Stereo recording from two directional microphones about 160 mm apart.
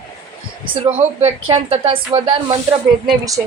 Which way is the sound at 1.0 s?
40° right (ahead or behind).